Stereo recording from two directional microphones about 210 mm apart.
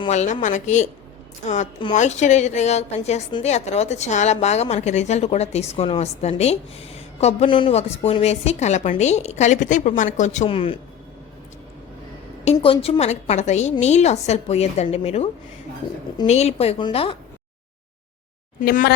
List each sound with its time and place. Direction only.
0.0 s a woman's voice: 35° left (ahead or behind)
12.5 s a woman's voice: 25° left (ahead or behind)
18.6 s a woman's voice: 40° left (ahead or behind)